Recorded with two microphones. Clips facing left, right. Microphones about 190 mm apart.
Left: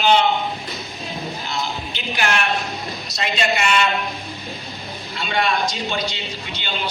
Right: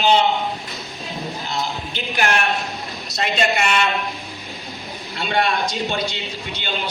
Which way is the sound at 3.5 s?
50° right (ahead or behind).